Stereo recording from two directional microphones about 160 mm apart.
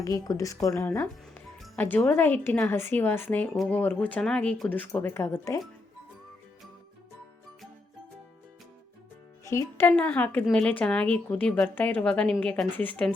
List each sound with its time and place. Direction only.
0.0 s a woman's voice: 20° left (ahead or behind)
9.4 s a woman's voice: 20° left (ahead or behind)